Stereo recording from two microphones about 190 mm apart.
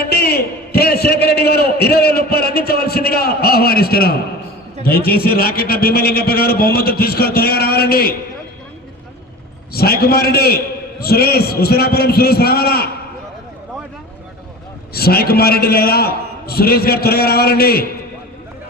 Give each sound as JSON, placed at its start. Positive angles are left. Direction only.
{"t": 0.0, "sound": "a sound", "side_deg": 55}
{"t": 4.8, "sound": "a man's voice", "side_deg": 50}
{"t": 9.7, "sound": "a man's voice", "side_deg": 55}
{"t": 14.9, "sound": "a man's voice", "side_deg": 55}